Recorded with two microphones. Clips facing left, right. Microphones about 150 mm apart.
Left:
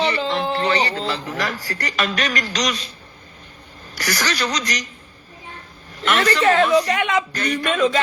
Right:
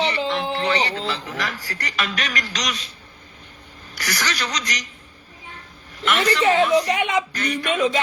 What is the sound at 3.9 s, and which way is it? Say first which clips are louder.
Speech: left 3 dB; 40° left (ahead or behind).